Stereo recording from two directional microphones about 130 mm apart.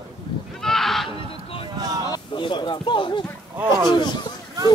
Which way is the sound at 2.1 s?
40° left (ahead or behind).